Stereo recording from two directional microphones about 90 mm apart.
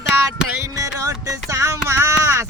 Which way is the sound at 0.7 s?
35° right (ahead or behind).